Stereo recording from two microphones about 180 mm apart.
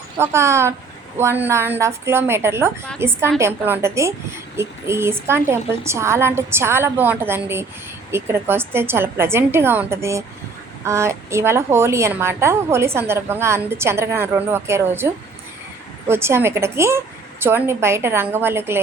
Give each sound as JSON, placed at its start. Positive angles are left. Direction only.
{"t": 0.2, "sound": "a woman's voice", "side_deg": -15}